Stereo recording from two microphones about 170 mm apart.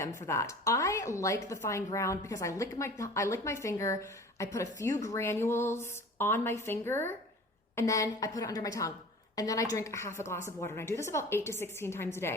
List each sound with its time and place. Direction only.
0.0 s a woman's voice: 15° left (ahead or behind)